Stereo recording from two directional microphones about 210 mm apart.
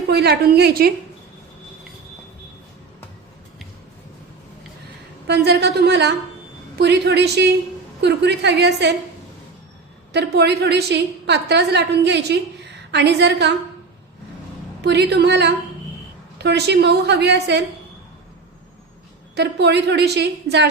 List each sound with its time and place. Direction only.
0.1 s a woman's voice: 50° right (ahead or behind)
5.3 s a woman's voice: 50° right (ahead or behind)
10.1 s a woman's voice: 50° right (ahead or behind)
14.8 s a woman's voice: 55° right (ahead or behind)
19.4 s a woman's voice: 55° right (ahead or behind)